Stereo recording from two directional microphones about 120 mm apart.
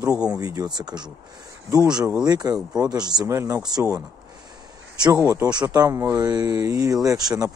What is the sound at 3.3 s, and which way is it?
Speech, 25° right (ahead or behind).